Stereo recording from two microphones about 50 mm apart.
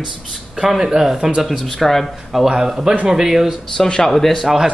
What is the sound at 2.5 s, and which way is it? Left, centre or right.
Speech, centre.